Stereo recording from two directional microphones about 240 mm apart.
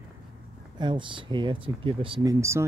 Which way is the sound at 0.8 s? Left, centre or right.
Centre.